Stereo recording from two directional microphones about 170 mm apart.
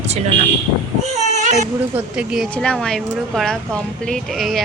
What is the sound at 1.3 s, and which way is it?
Baby cry, 45° right (ahead or behind).